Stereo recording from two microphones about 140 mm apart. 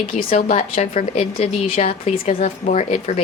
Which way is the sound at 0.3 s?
60° left (ahead or behind).